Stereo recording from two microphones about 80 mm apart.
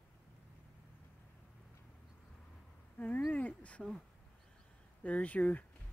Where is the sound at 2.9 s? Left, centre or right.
Centre.